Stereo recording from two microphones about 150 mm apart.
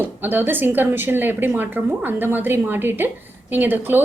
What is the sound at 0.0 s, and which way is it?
Speech, 15° right (ahead or behind).